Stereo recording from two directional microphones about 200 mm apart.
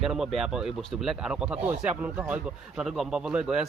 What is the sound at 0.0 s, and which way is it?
Speech, centre (ahead or behind).